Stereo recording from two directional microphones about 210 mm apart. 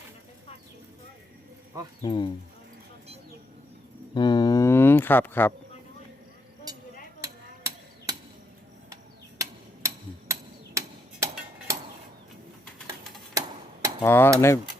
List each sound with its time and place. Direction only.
2.0 s speech: 20° left (ahead or behind)
4.1 s a sound: 20° left (ahead or behind)
7.2 s chop: 15° right (ahead or behind)
9.4 s a sound: 15° right (ahead or behind)
10.8 s hammer: 15° right (ahead or behind)
11.7 s dishes: 15° right (ahead or behind)
14.0 s cutlery: 10° left (ahead or behind)